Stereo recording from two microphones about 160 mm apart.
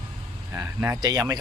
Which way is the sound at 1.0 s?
25° right (ahead or behind).